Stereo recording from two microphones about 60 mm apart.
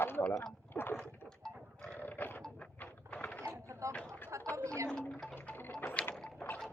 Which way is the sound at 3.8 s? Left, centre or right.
Right.